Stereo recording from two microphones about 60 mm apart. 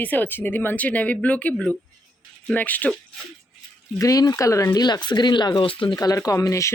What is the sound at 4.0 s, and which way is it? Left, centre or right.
Speech, left.